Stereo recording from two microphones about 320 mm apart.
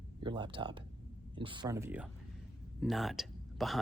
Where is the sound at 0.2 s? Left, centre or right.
Centre.